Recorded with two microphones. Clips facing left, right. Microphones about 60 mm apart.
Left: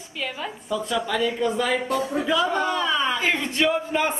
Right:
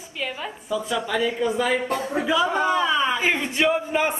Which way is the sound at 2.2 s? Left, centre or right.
Centre.